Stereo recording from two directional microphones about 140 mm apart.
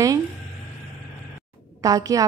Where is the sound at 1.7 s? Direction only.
25° right (ahead or behind).